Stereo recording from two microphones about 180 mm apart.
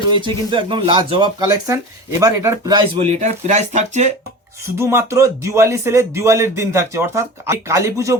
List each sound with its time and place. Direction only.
0.1 s speech: 25° right (ahead or behind)
4.8 s a man's voice: 15° right (ahead or behind)